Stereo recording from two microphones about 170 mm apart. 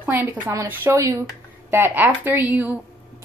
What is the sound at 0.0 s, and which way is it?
A woman's voice, 10° right (ahead or behind).